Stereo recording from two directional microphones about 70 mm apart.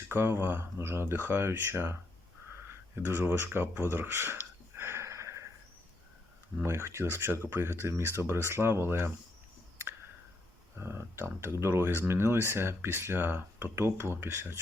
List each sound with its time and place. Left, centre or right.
0.1 s speech: right
4.8 s wheeze: right
6.6 s speech: right
10.8 s speech: right